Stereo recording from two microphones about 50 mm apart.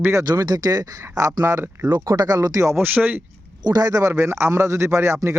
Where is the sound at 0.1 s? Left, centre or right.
Right.